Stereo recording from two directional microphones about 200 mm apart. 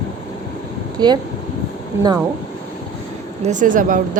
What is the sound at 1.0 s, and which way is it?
A woman's voice, 20° right (ahead or behind).